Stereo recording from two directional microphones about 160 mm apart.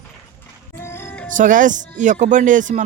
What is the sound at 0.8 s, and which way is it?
Music, 15° left (ahead or behind).